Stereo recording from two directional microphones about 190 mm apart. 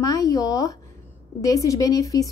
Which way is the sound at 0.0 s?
20° left (ahead or behind).